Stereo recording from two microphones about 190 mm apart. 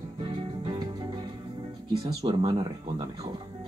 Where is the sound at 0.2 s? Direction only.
25° right (ahead or behind).